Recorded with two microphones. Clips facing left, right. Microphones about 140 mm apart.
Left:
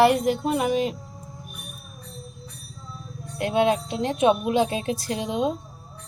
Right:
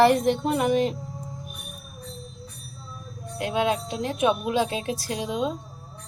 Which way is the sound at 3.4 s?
25° left (ahead or behind).